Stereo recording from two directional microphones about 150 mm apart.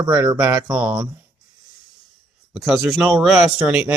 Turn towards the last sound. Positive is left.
turn(degrees=-5)  # may be behind; listen again after turning